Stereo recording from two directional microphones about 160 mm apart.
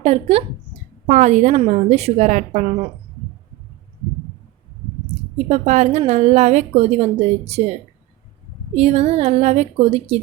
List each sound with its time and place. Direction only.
0.0 s a woman's voice: 40° right (ahead or behind)
5.5 s a woman's voice: 45° right (ahead or behind)
8.7 s a woman's voice: 40° right (ahead or behind)